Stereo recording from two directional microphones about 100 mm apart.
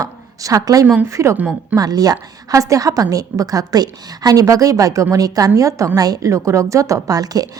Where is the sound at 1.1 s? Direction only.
30° right (ahead or behind).